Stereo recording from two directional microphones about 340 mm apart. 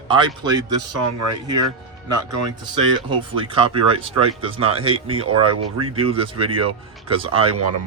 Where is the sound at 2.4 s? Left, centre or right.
Centre.